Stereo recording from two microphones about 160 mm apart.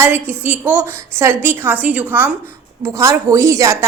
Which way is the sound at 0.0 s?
10° right (ahead or behind).